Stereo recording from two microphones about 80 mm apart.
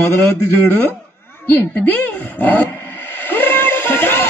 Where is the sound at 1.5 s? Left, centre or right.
Left.